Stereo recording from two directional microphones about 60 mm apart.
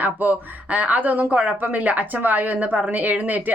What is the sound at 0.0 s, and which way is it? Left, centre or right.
Speech, right.